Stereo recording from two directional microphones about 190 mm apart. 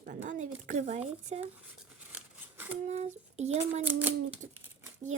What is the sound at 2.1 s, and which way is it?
Scissors, 10° right (ahead or behind).